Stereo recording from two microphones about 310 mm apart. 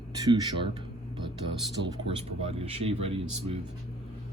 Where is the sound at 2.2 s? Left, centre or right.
Centre.